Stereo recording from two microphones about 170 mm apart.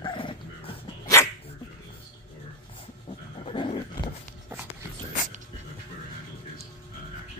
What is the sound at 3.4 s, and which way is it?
Dog, 30° left (ahead or behind).